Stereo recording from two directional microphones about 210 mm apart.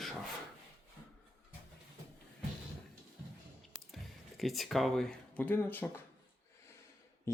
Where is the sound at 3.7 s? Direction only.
Centre (ahead or behind).